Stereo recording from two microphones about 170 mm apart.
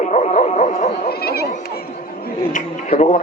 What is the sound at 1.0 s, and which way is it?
Speech, 70° left (ahead or behind).